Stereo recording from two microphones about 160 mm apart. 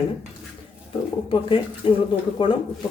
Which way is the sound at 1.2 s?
35° left (ahead or behind).